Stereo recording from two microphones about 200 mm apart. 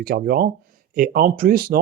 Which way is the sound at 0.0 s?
50° right (ahead or behind).